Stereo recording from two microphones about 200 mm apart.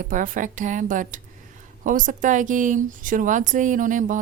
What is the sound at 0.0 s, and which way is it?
A woman's voice, 40° right (ahead or behind).